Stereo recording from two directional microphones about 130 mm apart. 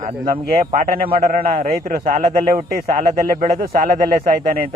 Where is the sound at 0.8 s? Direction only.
90° right.